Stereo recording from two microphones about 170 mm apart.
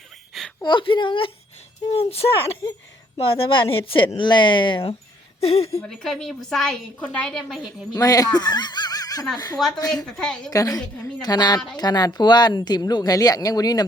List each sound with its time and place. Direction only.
0.6 s a woman's voice: 30° left (ahead or behind)
5.8 s a woman's voice: 5° left (ahead or behind)
7.9 s speech: 20° left (ahead or behind)
10.2 s a woman's voice: 5° left (ahead or behind)
10.5 s speech: 20° left (ahead or behind)